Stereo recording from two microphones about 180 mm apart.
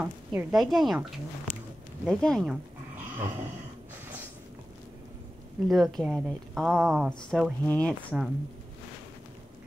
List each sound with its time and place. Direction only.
0.0 s speech: 5° right (ahead or behind)
1.5 s a sound: 50° left (ahead or behind)
2.0 s speech: 5° left (ahead or behind)
5.7 s speech: centre (ahead or behind)